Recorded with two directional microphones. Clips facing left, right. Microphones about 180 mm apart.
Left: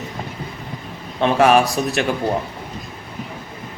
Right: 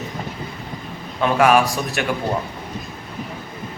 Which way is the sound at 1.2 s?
25° left (ahead or behind).